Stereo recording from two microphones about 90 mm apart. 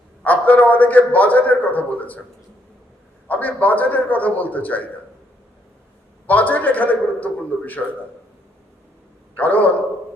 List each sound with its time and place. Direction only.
0.3 s a man's voice: 20° left (ahead or behind)
3.2 s a man's voice: 20° left (ahead or behind)
6.2 s a man's voice: 20° left (ahead or behind)
9.3 s a man's voice: 20° left (ahead or behind)